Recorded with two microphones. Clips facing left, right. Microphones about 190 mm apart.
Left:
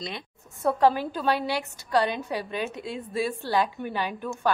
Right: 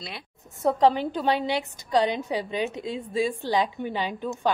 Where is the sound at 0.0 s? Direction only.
5° right (ahead or behind).